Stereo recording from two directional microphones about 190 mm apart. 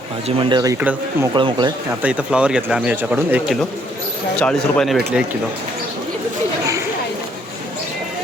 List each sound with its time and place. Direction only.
0.3 s speech: 30° right (ahead or behind)
0.6 s speech: 10° right (ahead or behind)
1.3 s speech: 25° right (ahead or behind)
2.0 s speech: 5° right (ahead or behind)